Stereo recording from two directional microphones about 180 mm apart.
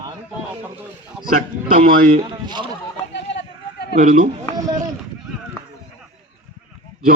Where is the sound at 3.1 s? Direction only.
75° left (ahead or behind).